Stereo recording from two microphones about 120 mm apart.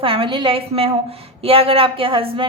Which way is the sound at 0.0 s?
50° right (ahead or behind).